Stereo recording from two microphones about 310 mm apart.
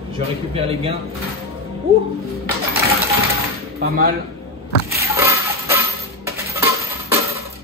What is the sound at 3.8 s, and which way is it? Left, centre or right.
Speech, right.